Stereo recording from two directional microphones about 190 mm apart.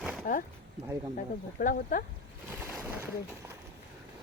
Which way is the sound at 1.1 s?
45° left (ahead or behind).